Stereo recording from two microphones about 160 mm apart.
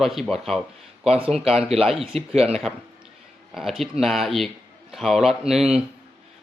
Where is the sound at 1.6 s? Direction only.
40° right (ahead or behind).